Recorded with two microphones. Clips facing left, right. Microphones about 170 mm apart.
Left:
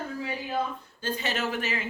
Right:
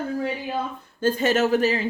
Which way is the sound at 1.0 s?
45° right (ahead or behind).